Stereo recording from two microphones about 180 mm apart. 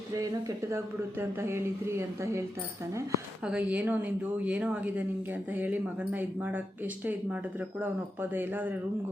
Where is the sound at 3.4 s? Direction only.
5° right (ahead or behind).